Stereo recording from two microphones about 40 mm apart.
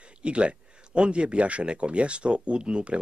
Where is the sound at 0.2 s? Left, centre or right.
Right.